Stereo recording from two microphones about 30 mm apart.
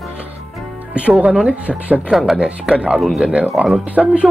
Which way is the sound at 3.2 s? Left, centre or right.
Right.